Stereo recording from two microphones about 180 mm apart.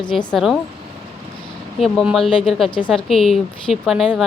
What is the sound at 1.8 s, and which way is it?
Speech, centre (ahead or behind).